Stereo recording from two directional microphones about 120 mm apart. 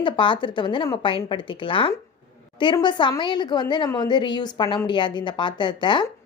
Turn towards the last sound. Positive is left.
turn(degrees=40)  # may be behind; listen again after turning